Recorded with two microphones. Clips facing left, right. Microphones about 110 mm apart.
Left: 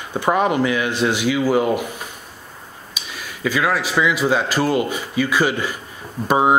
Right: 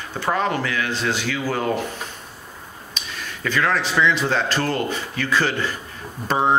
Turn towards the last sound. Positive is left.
turn(degrees=10)  # may be behind; listen again after turning